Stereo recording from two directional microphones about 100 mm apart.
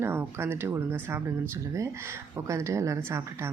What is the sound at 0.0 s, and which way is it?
Speech, 25° right (ahead or behind).